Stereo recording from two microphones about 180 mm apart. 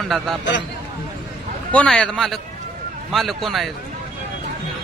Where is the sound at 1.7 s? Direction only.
5° left (ahead or behind).